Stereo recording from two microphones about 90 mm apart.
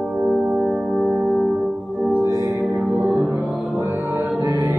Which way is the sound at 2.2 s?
40° right (ahead or behind).